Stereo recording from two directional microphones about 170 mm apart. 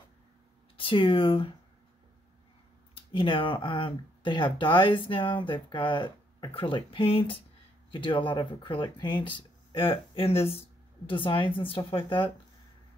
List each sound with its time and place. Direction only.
0.7 s speech: 30° left (ahead or behind)
2.9 s speech: 30° left (ahead or behind)